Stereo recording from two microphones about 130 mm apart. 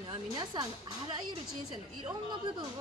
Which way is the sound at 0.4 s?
35° right (ahead or behind).